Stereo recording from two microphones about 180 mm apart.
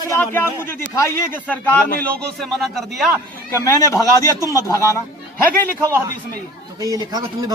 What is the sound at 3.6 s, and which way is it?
Speech, 20° left (ahead or behind).